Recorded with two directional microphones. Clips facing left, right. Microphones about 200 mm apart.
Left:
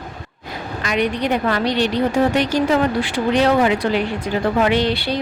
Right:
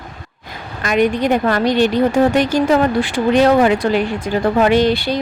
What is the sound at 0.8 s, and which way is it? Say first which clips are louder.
Speech: right 5 dB; 50° right (ahead or behind).